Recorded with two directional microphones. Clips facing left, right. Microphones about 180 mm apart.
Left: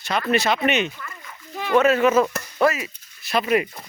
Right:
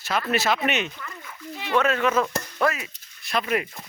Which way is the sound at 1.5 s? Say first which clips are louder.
Left 5 dB; 45° left (ahead or behind).